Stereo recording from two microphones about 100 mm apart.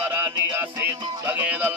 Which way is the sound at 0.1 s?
20° right (ahead or behind).